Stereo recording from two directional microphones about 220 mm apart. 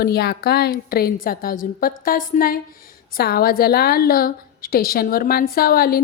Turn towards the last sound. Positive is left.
turn(degrees=45)  # may be behind; listen again after turning